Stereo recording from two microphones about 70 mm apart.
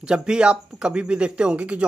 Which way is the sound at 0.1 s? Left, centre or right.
Centre.